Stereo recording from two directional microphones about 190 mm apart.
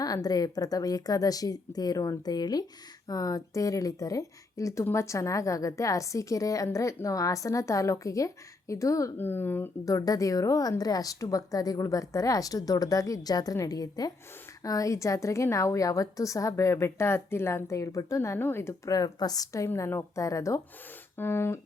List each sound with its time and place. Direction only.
0.0 s a woman's voice: 20° left (ahead or behind)